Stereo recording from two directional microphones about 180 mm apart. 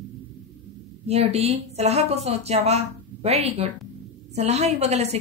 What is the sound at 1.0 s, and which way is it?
A woman's voice, 35° right (ahead or behind).